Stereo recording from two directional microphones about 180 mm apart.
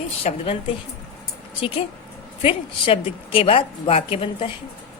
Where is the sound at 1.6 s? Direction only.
30° left (ahead or behind).